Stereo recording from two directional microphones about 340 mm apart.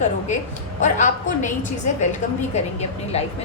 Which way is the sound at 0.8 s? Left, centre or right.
Left.